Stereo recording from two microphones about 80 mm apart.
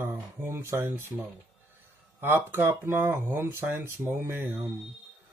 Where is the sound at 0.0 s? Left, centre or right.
Right.